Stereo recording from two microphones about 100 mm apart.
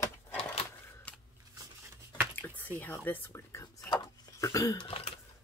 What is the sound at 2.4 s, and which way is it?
Speech, 15° left (ahead or behind).